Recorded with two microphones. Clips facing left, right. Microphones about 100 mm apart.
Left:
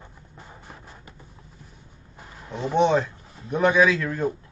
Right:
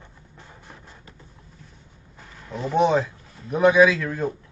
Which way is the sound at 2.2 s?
15° left (ahead or behind).